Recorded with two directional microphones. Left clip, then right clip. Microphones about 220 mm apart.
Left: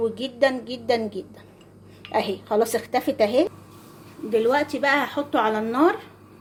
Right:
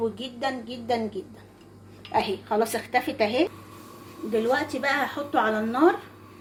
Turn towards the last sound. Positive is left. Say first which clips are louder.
# left 1 dB
turn(degrees=40)  # may be behind; listen again after turning